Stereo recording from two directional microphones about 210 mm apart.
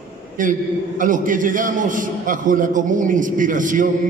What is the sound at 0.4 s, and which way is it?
A man's voice, 40° right (ahead or behind).